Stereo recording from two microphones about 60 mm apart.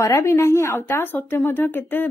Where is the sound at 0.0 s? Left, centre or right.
Left.